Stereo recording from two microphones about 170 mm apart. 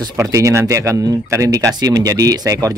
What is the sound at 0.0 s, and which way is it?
Speech, 20° right (ahead or behind).